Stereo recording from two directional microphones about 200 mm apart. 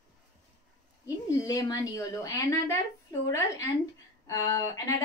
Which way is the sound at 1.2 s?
20° left (ahead or behind).